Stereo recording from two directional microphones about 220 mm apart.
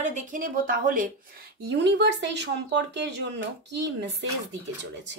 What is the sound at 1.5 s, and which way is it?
Speech, 50° right (ahead or behind).